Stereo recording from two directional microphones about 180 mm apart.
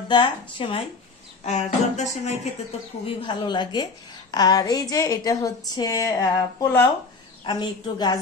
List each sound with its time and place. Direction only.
0.1 s a woman's voice: 30° left (ahead or behind)
1.4 s speech: 40° left (ahead or behind)
3.3 s a woman's voice: 25° left (ahead or behind)
7.4 s a woman's voice: 25° left (ahead or behind)